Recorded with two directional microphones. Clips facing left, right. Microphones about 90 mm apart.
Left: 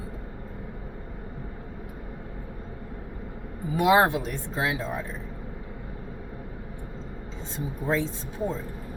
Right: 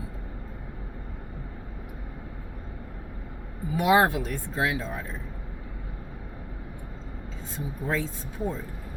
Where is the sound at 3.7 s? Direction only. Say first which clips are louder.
Left 1 dB; 25° left (ahead or behind).